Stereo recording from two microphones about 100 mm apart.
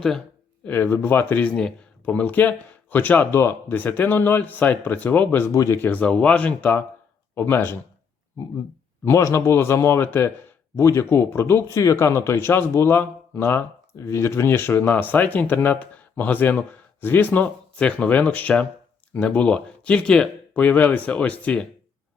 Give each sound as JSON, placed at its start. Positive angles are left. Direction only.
{"t": 0.6, "sound": "speech", "side_deg": 20}
{"t": 9.0, "sound": "speech", "side_deg": 30}